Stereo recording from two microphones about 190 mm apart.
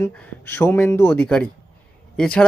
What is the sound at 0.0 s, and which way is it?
Speech, 10° left (ahead or behind).